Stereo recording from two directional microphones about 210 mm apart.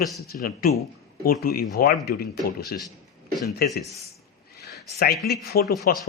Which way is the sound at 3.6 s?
45° left (ahead or behind).